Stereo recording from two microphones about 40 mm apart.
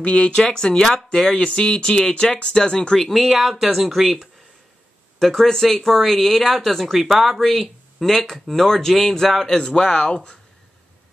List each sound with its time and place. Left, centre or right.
0.0 s speech: left
0.8 s speech: centre
3.1 s speech: centre
5.2 s speech: centre
9.6 s speech: centre